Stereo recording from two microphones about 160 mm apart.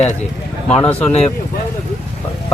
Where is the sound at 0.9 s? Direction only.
10° left (ahead or behind).